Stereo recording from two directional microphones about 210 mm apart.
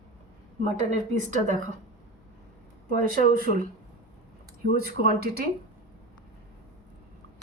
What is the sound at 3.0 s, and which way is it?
Speech, 40° right (ahead or behind).